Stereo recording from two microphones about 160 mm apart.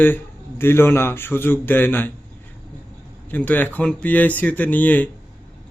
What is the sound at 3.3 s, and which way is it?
A man's voice, 10° left (ahead or behind).